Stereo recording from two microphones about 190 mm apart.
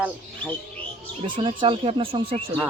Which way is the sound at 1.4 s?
25° right (ahead or behind).